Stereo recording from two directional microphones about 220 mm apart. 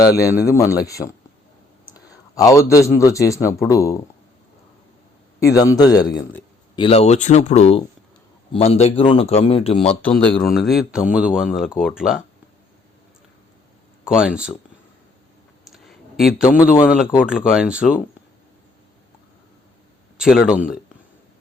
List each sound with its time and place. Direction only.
0.2 s a man's voice: 15° left (ahead or behind)
1.9 s a sound: 15° left (ahead or behind)
3.0 s a man's voice: 15° left (ahead or behind)
5.4 s a man's voice: 15° left (ahead or behind)
9.9 s speech: 5° left (ahead or behind)
14.2 s speech: 5° right (ahead or behind)
15.6 s a sound: centre (ahead or behind)
16.8 s speech: 5° right (ahead or behind)
20.1 s speech: 5° right (ahead or behind)